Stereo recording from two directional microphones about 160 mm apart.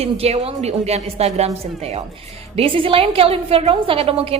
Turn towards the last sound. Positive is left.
turn(degrees=-35)  # may be behind; listen again after turning